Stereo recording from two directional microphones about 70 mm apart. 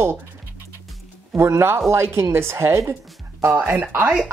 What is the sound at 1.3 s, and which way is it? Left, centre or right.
Speech, right.